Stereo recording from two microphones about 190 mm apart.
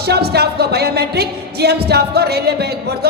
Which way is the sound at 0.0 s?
55° right (ahead or behind).